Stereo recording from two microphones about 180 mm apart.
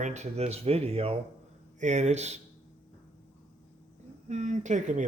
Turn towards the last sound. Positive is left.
turn(degrees=-40)  # may be behind; listen again after turning